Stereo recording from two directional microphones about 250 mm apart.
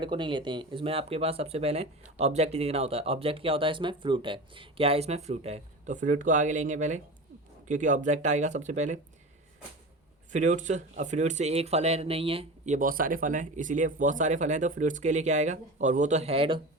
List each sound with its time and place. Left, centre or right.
0.0 s speech: centre
10.3 s speech: right